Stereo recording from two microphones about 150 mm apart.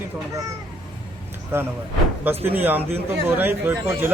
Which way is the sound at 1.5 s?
15° right (ahead or behind).